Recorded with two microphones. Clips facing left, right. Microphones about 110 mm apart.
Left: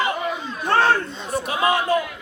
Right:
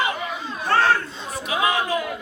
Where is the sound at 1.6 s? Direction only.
30° left (ahead or behind).